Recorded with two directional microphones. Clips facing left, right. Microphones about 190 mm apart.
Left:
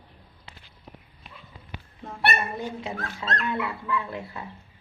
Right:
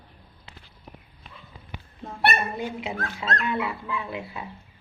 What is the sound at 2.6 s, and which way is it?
Speech, 15° right (ahead or behind).